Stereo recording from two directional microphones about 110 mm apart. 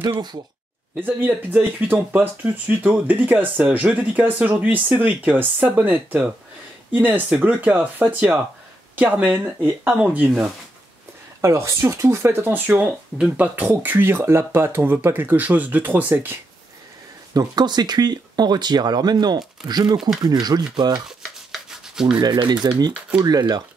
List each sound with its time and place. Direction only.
0.9 s speech: 15° right (ahead or behind)
11.4 s speech: 25° right (ahead or behind)
17.3 s speech: 35° right (ahead or behind)
21.2 s rub: 5° right (ahead or behind)
22.4 s speech: 40° right (ahead or behind)